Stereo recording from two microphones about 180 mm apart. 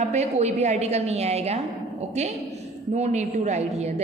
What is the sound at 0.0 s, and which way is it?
A woman's voice, 40° right (ahead or behind).